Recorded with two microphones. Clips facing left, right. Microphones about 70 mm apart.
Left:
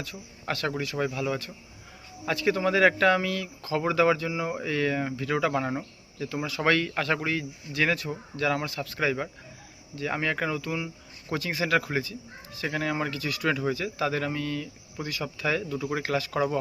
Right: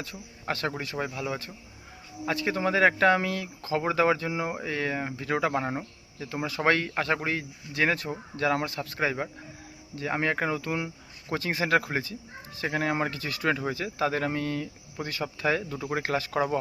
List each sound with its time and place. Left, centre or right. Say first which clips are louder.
0.0 s speech: even; right
0.9 s speech: left 3 dB; centre